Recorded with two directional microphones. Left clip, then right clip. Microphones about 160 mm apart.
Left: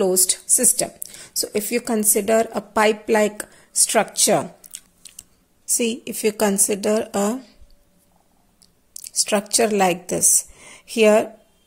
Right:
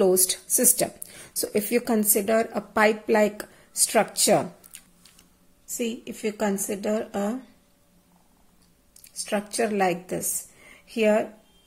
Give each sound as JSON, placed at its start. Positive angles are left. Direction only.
{"t": 0.0, "sound": "speech", "side_deg": 10}
{"t": 2.1, "sound": "speech", "side_deg": 25}
{"t": 5.8, "sound": "speech", "side_deg": 40}
{"t": 8.9, "sound": "speech", "side_deg": 35}